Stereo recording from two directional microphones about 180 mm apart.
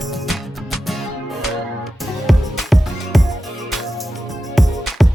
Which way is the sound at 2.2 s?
Centre (ahead or behind).